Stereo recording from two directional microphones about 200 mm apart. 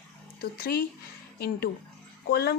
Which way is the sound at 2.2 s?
55° left (ahead or behind).